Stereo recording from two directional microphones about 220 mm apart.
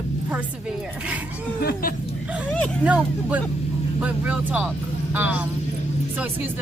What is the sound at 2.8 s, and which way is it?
Speech, 5° right (ahead or behind).